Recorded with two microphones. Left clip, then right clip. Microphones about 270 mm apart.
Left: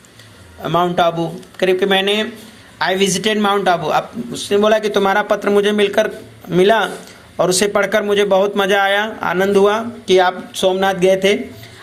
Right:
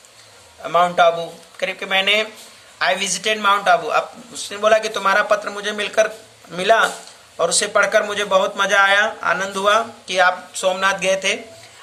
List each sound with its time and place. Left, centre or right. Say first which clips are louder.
0.6 s speech: even; centre